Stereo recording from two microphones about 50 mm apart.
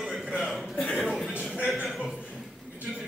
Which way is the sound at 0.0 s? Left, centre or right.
Centre.